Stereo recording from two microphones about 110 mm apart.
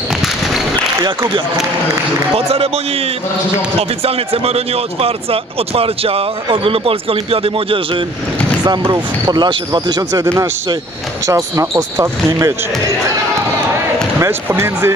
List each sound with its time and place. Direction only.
0.1 s a sound: centre (ahead or behind)
2.3 s speech: 65° right (ahead or behind)
4.0 s speech: 65° right (ahead or behind)
8.6 s speech: 40° right (ahead or behind)
10.2 s speech: 25° right (ahead or behind)
14.2 s speech: 20° right (ahead or behind)